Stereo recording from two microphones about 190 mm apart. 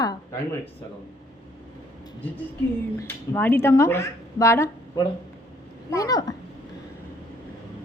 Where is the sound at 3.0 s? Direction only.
10° left (ahead or behind).